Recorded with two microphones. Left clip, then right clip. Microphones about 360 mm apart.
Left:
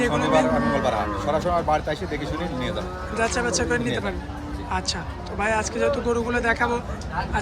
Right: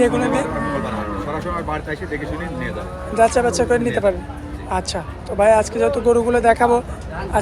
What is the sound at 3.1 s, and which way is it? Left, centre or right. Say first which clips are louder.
Speech: right 9 dB; centre.